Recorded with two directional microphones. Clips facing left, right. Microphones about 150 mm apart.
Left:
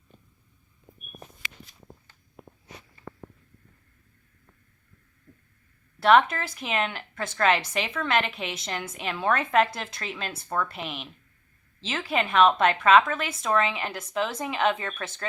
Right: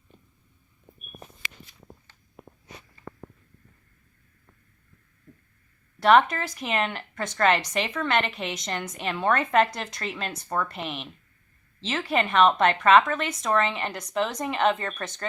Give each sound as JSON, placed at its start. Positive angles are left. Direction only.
{"t": 6.0, "sound": "a woman's voice", "side_deg": 0}